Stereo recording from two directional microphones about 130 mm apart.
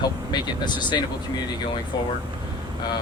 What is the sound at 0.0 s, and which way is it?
Speech, 35° left (ahead or behind).